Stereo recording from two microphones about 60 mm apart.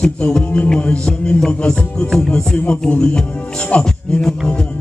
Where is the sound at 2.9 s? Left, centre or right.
Left.